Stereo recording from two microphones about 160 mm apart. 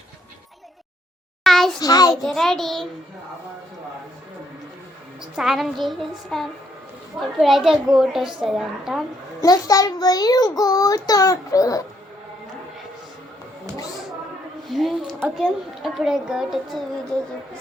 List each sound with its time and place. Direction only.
1.5 s a sound: centre (ahead or behind)
1.8 s a child's voice: 20° left (ahead or behind)
2.2 s a child's voice: centre (ahead or behind)
5.2 s a child's voice: 5° right (ahead or behind)
9.4 s a child's voice: 20° left (ahead or behind)
14.7 s a child's voice: centre (ahead or behind)